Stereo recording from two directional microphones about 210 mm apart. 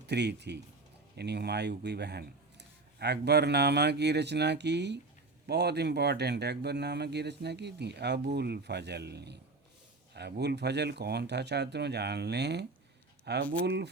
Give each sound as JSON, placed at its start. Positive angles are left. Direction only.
{"t": 0.1, "sound": "speech", "side_deg": -55}